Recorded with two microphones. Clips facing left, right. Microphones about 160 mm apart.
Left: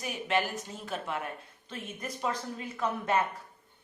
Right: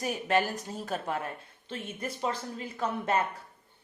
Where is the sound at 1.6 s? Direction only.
30° right (ahead or behind).